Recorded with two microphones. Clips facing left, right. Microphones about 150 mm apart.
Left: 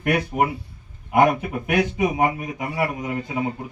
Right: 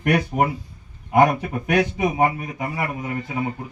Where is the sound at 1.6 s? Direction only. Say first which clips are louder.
Right 1 dB; 10° left (ahead or behind).